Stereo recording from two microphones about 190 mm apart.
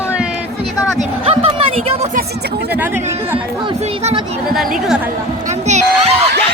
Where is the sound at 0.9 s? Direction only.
30° right (ahead or behind).